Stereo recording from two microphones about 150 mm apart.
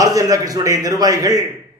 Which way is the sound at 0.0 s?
25° right (ahead or behind).